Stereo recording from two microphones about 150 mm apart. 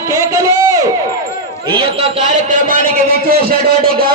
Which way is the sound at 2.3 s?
60° right (ahead or behind).